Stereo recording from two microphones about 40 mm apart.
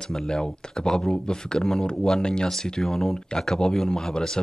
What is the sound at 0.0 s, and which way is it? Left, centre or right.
Speech, centre.